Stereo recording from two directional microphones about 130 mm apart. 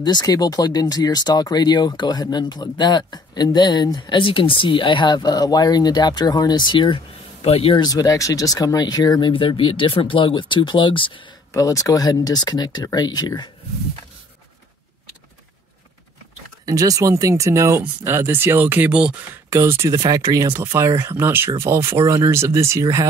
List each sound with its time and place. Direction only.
0.0 s speech: 30° left (ahead or behind); by 7.8 s 50° left (ahead or behind)
7.8 s speech: 30° left (ahead or behind)
9.3 s speech: 40° left (ahead or behind)
11.5 s speech: 25° left (ahead or behind)
16.6 s speech: 25° right (ahead or behind); by 19.2 s 10° right (ahead or behind)
19.5 s speech: 20° right (ahead or behind)